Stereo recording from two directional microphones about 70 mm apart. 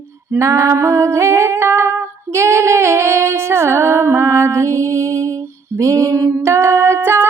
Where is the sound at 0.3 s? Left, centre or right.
Right.